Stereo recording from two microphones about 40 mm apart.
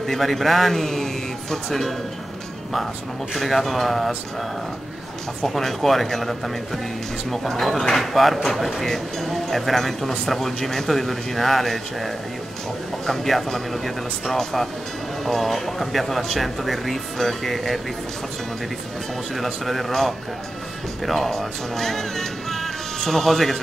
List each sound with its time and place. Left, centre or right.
0.0 s a man's voice: centre
3.3 s speech: centre
5.4 s a man's voice: centre
19.3 s speech: centre